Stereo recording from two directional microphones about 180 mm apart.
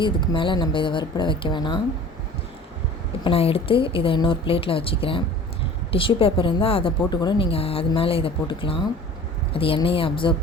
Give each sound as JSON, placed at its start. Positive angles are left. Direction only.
{"t": 0.0, "sound": "speech", "side_deg": 25}
{"t": 3.2, "sound": "a woman's voice", "side_deg": 30}